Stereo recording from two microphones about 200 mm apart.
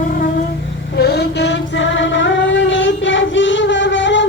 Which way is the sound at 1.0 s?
55° left (ahead or behind).